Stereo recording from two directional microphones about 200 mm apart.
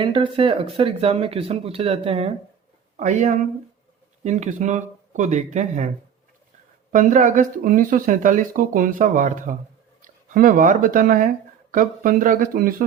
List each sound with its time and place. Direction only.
0.0 s speech: 25° right (ahead or behind)
6.9 s speech: 40° right (ahead or behind)